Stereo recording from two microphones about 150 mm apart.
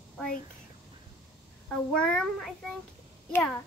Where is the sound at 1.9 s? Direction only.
5° left (ahead or behind).